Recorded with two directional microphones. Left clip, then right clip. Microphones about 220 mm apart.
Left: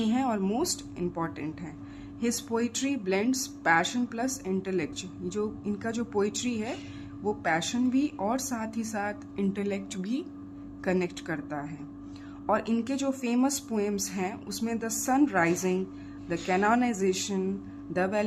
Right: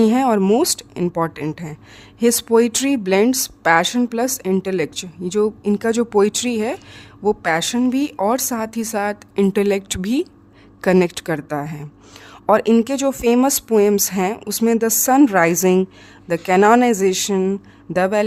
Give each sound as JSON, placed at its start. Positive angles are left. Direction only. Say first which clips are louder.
{"t": 0.0, "sound": "speech", "louder": "right 13 dB", "side_deg": -45}